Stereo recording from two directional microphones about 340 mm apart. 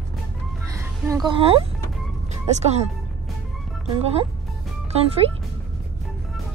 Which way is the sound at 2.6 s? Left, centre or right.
Centre.